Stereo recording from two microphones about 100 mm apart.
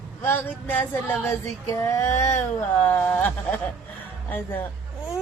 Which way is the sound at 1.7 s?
30° left (ahead or behind).